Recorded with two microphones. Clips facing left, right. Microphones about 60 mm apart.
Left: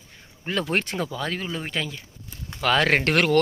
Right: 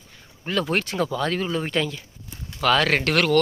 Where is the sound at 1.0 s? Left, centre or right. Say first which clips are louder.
Right 5 dB; centre.